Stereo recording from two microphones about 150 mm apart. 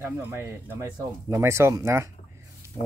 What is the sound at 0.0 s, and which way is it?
Speech, 15° right (ahead or behind).